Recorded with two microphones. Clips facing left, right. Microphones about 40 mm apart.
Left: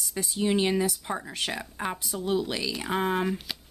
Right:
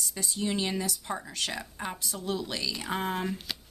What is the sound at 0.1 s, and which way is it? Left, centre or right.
A woman's voice, centre.